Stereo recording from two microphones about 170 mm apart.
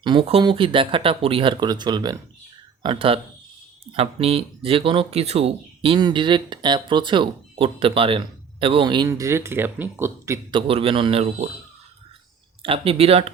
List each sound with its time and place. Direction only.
0.0 s speech: 30° right (ahead or behind)
10.5 s speech: 35° right (ahead or behind)
12.6 s speech: 35° right (ahead or behind)